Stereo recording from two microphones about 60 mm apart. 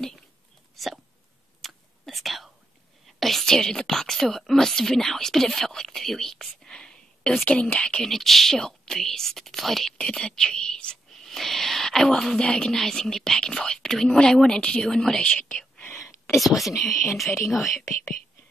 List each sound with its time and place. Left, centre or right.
1.6 s whispering: centre
3.2 s a woman's voice: centre
9.9 s a woman's voice: centre
11.2 s a woman's voice: centre
15.2 s speech: left
16.0 s whispering: left
16.3 s speech: centre